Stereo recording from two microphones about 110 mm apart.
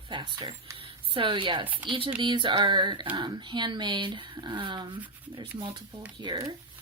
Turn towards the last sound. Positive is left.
turn(degrees=-45)  # may be behind; listen again after turning